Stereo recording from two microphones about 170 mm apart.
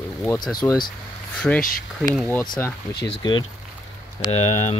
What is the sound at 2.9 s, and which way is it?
Speech, 80° left.